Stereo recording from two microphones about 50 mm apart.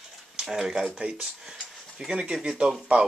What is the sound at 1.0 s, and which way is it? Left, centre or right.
Speech, centre.